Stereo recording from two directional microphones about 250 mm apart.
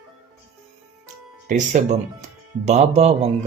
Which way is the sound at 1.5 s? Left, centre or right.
Right.